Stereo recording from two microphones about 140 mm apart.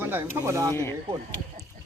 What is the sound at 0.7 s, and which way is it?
Speech, 20° left (ahead or behind).